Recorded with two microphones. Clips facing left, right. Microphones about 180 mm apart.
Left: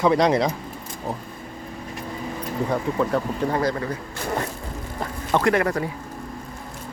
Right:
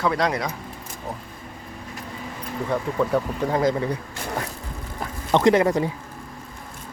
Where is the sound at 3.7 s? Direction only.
15° right (ahead or behind).